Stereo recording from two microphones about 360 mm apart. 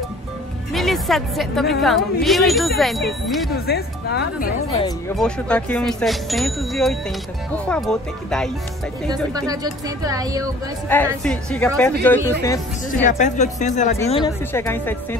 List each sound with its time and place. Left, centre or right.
0.7 s a woman's voice: centre
3.6 s speech: left
5.1 s speech: centre
9.5 s speech: centre
10.9 s speech: centre
13.0 s speech: centre